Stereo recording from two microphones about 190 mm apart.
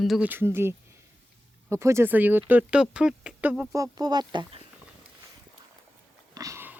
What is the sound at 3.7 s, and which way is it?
Speech, 20° right (ahead or behind).